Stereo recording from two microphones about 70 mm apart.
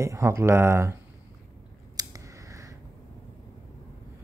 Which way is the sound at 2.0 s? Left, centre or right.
Right.